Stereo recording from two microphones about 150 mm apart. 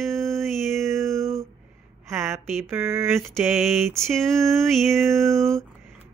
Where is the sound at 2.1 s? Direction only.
15° right (ahead or behind).